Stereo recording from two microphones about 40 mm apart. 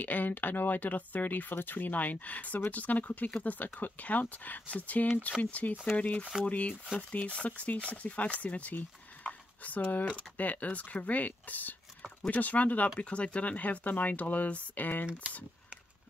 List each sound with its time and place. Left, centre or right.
0.0 s speech: left